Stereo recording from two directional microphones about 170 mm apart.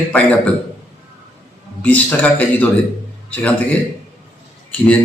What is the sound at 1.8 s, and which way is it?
Speech, 10° left (ahead or behind).